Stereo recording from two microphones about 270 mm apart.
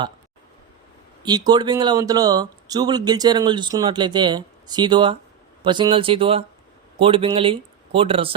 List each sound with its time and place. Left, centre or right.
1.2 s speech: centre